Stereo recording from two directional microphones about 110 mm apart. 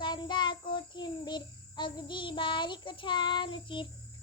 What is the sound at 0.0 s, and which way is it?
Child singing, 45° left (ahead or behind).